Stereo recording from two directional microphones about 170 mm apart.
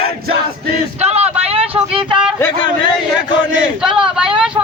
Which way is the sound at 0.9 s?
40° right (ahead or behind).